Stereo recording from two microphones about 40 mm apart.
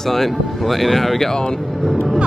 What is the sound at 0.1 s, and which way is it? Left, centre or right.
Speech, centre.